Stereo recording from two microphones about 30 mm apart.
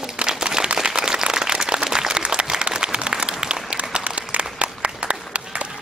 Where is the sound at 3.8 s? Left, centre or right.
Right.